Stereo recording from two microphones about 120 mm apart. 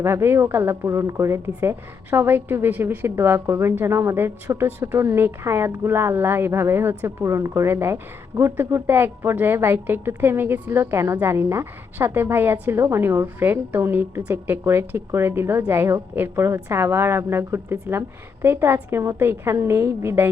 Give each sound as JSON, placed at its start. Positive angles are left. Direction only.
{"t": 0.0, "sound": "a woman's voice", "side_deg": -20}